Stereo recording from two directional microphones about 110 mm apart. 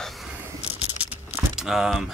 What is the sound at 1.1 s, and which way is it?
Keys jangling, 10° right (ahead or behind).